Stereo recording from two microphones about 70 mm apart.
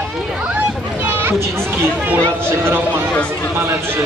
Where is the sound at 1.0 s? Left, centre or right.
Right.